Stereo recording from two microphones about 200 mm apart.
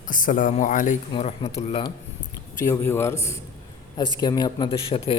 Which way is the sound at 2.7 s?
15° left (ahead or behind).